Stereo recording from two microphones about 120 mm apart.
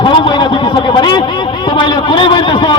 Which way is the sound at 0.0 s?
40° left (ahead or behind).